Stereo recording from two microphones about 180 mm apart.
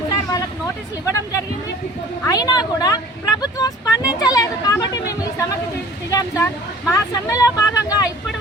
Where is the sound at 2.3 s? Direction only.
20° left (ahead or behind).